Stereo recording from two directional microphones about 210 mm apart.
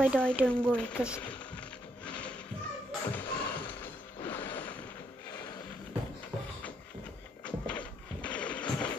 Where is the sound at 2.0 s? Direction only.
5° left (ahead or behind).